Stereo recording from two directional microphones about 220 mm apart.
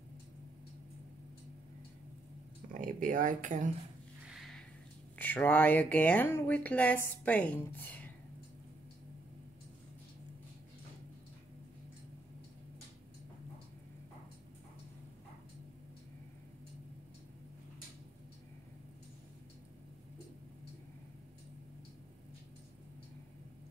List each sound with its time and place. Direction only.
2.7 s speech: 35° right (ahead or behind)
4.3 s a sound: centre (ahead or behind)
5.2 s speech: 10° left (ahead or behind)